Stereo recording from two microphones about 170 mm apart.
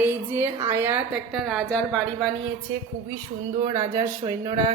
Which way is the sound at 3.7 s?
20° right (ahead or behind).